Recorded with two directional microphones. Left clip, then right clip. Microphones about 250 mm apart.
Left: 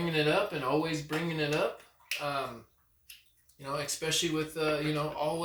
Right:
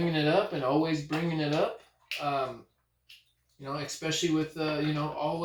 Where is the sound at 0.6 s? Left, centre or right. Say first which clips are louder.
Right 3 dB; left.